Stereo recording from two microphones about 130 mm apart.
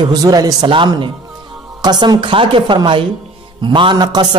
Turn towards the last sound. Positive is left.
turn(degrees=-35)  # may be behind; listen again after turning